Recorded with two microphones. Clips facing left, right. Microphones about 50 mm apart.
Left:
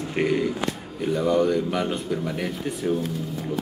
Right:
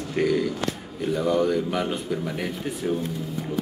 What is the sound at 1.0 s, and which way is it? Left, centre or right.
Speech, centre.